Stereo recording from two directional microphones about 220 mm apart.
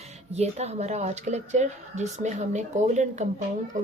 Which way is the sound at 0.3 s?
30° right (ahead or behind).